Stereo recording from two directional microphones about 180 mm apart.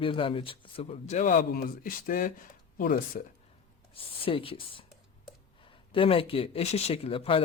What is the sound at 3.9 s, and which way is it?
Speech, 30° left (ahead or behind).